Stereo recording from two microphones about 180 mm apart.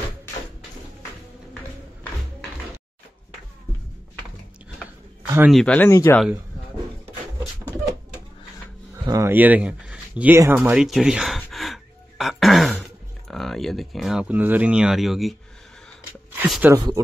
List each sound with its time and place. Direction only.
5.5 s speech: 5° left (ahead or behind)
9.0 s a man's voice: 15° right (ahead or behind)
10.4 s gasp: 10° right (ahead or behind)
13.3 s speech: centre (ahead or behind)
16.4 s speech: centre (ahead or behind)
16.7 s speech: 20° right (ahead or behind)